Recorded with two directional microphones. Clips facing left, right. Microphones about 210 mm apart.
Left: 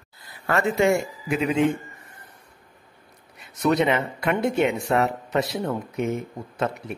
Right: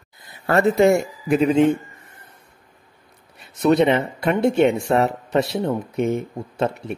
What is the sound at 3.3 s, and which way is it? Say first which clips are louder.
Speech: right 5 dB; 30° right (ahead or behind).